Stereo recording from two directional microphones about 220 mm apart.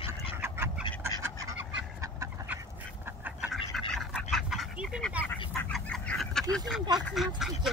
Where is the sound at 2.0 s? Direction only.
15° right (ahead or behind).